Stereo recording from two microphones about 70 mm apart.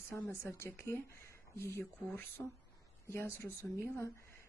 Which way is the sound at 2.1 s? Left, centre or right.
Left.